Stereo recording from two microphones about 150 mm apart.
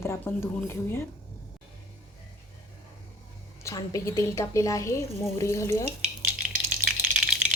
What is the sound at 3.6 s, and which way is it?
A woman's voice, 20° left (ahead or behind).